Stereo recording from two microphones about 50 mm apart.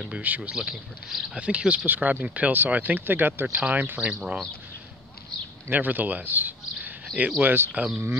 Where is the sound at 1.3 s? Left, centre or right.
Right.